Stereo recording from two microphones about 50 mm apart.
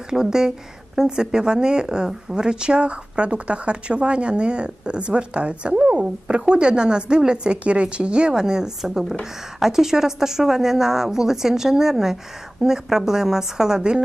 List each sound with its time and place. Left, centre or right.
0.1 s a woman's voice: centre